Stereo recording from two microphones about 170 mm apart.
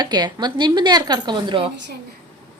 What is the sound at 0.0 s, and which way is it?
Speech, 25° right (ahead or behind).